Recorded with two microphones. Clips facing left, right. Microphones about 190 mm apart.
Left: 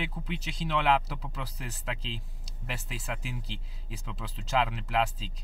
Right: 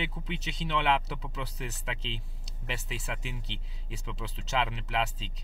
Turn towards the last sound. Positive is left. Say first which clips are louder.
# left 3 dB
turn(degrees=5)  # may be behind; listen again after turning